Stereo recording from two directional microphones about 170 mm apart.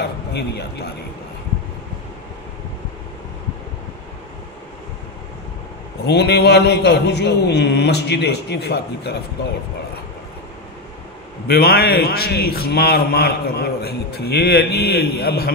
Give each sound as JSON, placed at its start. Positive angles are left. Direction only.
{"t": 0.0, "sound": "a sound", "side_deg": 75}
{"t": 6.0, "sound": "a man's voice", "side_deg": 80}
{"t": 11.4, "sound": "a man's voice", "side_deg": 70}